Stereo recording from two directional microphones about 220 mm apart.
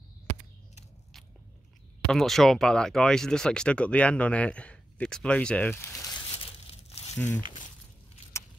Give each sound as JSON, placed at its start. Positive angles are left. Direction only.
{"t": 2.0, "sound": "speech", "side_deg": 0}
{"t": 6.3, "sound": "crumpling", "side_deg": 25}
{"t": 7.2, "sound": "speech", "side_deg": 5}